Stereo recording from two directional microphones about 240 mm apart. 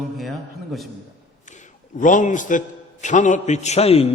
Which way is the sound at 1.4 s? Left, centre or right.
Left.